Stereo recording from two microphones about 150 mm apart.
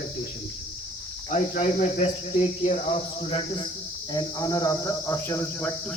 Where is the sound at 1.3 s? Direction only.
55° left (ahead or behind).